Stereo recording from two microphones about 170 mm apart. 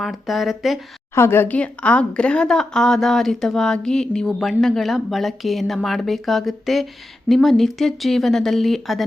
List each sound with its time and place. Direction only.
0.0 s speech: centre (ahead or behind)
1.1 s speech: 15° left (ahead or behind)